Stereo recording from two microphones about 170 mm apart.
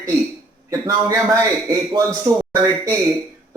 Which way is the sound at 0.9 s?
20° right (ahead or behind).